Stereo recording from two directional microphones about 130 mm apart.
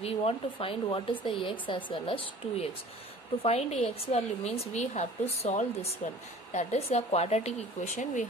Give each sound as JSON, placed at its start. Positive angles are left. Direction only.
{"t": 0.0, "sound": "a woman's voice", "side_deg": 50}